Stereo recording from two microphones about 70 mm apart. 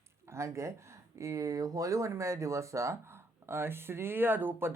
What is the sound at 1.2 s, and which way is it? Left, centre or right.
Speech, right.